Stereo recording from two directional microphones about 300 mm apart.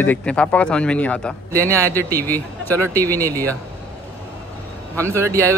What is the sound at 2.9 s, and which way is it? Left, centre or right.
Speech, centre.